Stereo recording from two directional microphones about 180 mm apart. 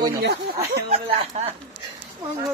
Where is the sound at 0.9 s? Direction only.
35° right (ahead or behind).